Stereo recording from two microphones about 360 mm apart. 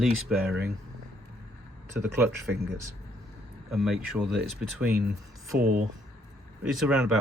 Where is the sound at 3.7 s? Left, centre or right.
Centre.